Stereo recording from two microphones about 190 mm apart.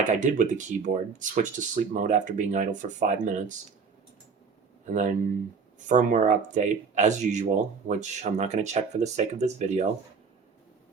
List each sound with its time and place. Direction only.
0.0 s speech: 40° right (ahead or behind)
4.9 s speech: 40° right (ahead or behind)